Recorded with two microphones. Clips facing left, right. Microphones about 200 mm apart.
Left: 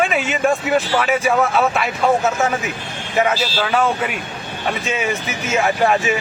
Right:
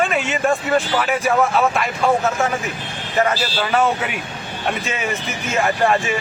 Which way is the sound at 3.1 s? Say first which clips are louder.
Left 1 dB; centre (ahead or behind).